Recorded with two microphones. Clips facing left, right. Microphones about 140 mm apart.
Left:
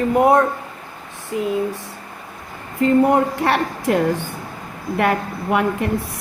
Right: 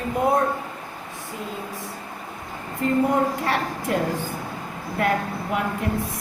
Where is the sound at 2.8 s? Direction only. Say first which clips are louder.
Left 6 dB; 70° left (ahead or behind).